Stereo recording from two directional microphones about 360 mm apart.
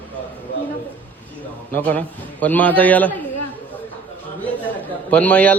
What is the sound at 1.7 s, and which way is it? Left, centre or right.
A man's voice, centre.